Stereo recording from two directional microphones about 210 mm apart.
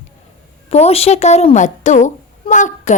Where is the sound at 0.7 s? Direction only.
30° left (ahead or behind).